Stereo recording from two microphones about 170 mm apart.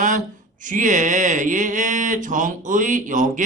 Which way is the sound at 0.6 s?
50° right (ahead or behind).